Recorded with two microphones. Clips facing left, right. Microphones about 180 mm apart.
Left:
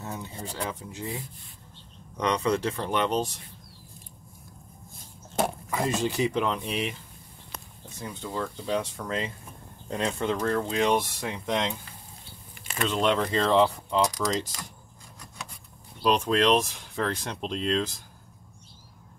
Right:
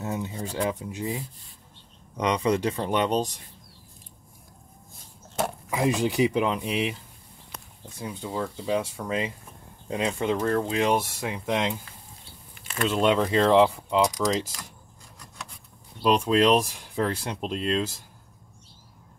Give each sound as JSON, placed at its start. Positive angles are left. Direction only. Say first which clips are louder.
{"t": 0.0, "sound": "speech", "louder": "right 6 dB", "side_deg": -15}
{"t": 2.1, "sound": "speech", "louder": "right 2 dB", "side_deg": -10}
{"t": 5.7, "sound": "speech", "louder": "right 3 dB", "side_deg": -15}
{"t": 8.0, "sound": "speech", "louder": "right 2 dB", "side_deg": -10}
{"t": 16.0, "sound": "speech", "louder": "right 2 dB", "side_deg": -5}